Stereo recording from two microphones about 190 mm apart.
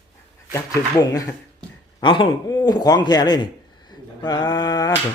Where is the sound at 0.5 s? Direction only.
15° left (ahead or behind).